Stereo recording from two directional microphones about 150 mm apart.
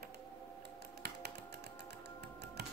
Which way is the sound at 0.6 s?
90° right.